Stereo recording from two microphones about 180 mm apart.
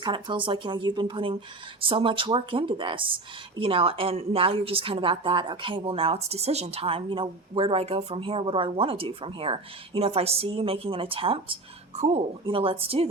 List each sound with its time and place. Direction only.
0.0 s a woman's voice: 25° right (ahead or behind)